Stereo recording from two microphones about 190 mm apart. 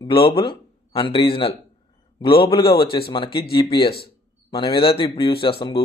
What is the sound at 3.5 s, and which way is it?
Speech, 25° left (ahead or behind).